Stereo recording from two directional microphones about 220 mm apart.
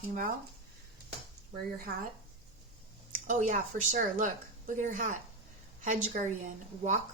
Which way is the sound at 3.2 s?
35° right (ahead or behind).